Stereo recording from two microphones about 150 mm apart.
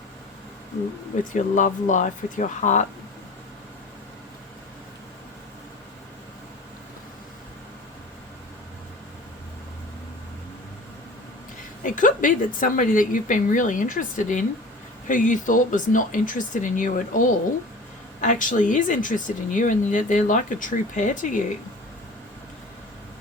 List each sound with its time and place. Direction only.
1.1 s speech: 55° left (ahead or behind)
11.8 s speech: 60° left (ahead or behind)